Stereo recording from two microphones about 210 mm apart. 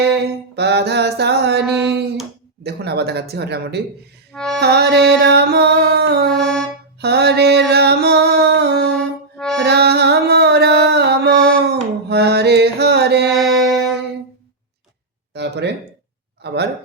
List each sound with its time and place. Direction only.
0.2 s mantra: 55° right (ahead or behind)
2.6 s music: 50° right (ahead or behind)
4.4 s music: centre (ahead or behind)
4.6 s music: 50° right (ahead or behind)
6.3 s music: 5° left (ahead or behind)
7.0 s a sound: 50° right (ahead or behind)
9.0 s music: 5° left (ahead or behind)
9.6 s music: 50° right (ahead or behind)
13.3 s music: centre (ahead or behind)
15.3 s a sound: 55° right (ahead or behind)